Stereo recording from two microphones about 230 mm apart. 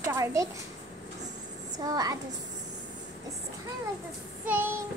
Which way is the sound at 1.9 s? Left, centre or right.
Centre.